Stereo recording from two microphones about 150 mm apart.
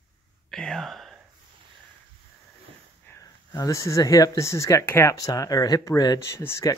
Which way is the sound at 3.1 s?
15° left (ahead or behind).